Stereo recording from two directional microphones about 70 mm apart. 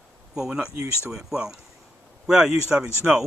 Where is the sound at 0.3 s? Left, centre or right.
Centre.